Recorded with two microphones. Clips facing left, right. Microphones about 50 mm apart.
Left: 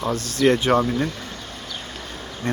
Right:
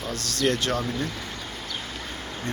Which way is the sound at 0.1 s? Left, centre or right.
Left.